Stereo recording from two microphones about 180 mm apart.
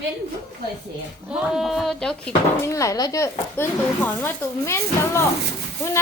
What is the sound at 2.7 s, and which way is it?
Speech, 15° left (ahead or behind).